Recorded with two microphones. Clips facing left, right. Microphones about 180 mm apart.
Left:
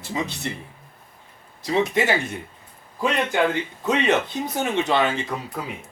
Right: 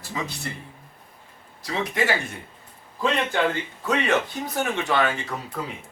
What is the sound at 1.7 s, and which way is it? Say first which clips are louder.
Speech: left 4 dB; 20° left (ahead or behind).